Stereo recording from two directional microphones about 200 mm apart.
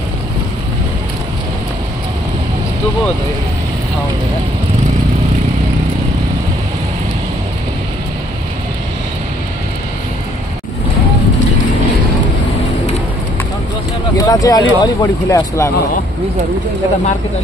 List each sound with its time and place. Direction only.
14.1 s speech: 15° left (ahead or behind)